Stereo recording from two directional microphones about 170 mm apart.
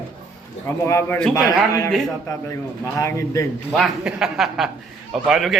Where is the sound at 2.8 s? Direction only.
20° left (ahead or behind).